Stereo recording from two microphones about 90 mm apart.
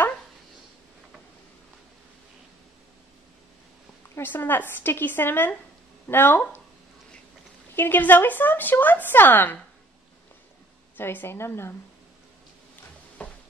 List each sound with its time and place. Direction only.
4.1 s a woman's voice: 25° left (ahead or behind)
7.7 s a woman's voice: 25° left (ahead or behind)
11.0 s a woman's voice: 25° left (ahead or behind)
13.2 s a sound: 15° left (ahead or behind)